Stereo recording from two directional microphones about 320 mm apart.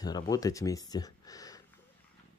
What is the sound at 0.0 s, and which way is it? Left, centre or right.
Speech, centre.